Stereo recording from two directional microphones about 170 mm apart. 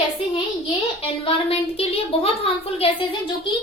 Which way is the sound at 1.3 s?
35° left (ahead or behind).